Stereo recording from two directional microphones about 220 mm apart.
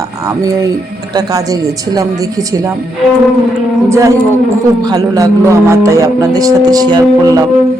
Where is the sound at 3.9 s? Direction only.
15° right (ahead or behind).